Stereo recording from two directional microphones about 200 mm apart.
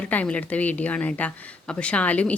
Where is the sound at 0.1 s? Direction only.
5° left (ahead or behind).